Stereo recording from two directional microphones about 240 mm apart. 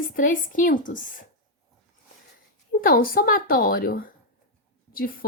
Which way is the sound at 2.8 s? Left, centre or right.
Left.